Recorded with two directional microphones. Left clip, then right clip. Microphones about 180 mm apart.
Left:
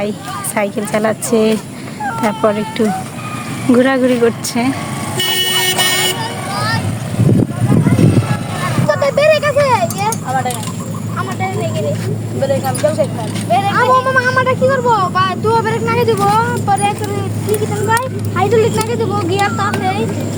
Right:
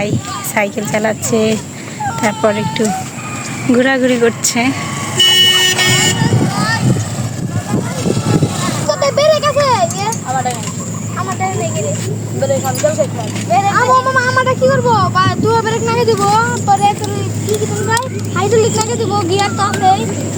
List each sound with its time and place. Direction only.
0.5 s speech: centre (ahead or behind)
2.2 s speech: centre (ahead or behind)
5.1 s vehicle: 70° left (ahead or behind)
7.9 s vehicle: 5° left (ahead or behind)
8.9 s a sound: 15° left (ahead or behind); by 10.2 s 35° left (ahead or behind)
13.5 s speech: 45° left (ahead or behind); by 16.9 s 10° left (ahead or behind)
18.3 s speech: centre (ahead or behind); by 20.1 s 20° left (ahead or behind)